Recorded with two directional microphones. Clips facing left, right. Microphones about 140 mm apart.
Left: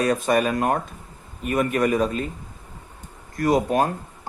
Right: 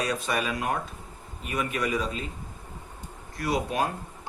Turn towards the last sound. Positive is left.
turn(degrees=45)  # may be behind; listen again after turning